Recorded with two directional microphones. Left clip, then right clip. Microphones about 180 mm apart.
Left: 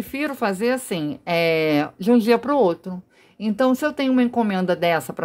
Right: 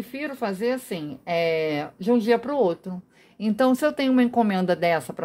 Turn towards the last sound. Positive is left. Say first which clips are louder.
# left 2 dB
turn(degrees=15)  # may be behind; listen again after turning